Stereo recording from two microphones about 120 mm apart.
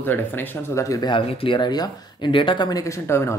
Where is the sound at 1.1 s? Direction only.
50° left (ahead or behind).